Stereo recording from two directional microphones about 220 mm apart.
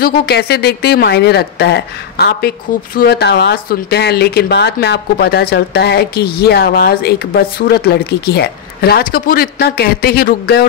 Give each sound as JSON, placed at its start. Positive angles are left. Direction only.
{"t": 0.0, "sound": "speech", "side_deg": 45}